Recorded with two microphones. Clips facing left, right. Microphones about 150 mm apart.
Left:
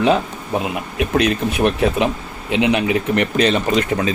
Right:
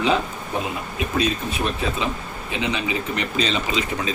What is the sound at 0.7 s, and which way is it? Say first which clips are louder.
Speech: left 6 dB; 75° left (ahead or behind).